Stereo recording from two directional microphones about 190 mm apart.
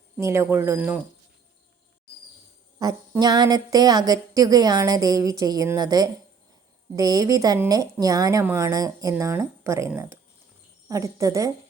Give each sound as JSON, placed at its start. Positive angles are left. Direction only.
{"t": 0.2, "sound": "a woman's voice", "side_deg": -15}
{"t": 2.7, "sound": "a sound", "side_deg": -20}
{"t": 6.9, "sound": "a woman's voice", "side_deg": -20}